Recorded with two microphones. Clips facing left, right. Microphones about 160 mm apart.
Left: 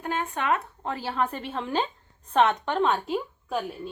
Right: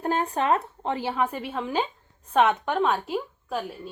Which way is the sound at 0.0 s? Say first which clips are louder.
Right 4 dB; 35° right (ahead or behind).